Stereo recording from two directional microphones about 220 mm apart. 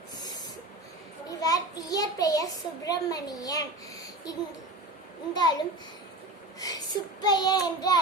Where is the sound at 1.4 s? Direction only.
15° left (ahead or behind).